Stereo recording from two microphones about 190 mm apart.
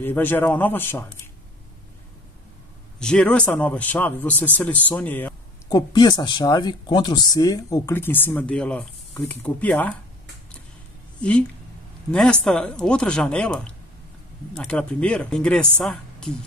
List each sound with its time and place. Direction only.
0.0 s speech: 10° left (ahead or behind)
3.0 s speech: 5° left (ahead or behind)
5.7 s speech: 20° left (ahead or behind)
11.1 s a woman's voice: 5° left (ahead or behind)